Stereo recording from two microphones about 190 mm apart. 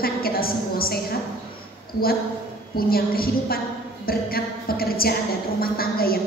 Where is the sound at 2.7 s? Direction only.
50° left (ahead or behind).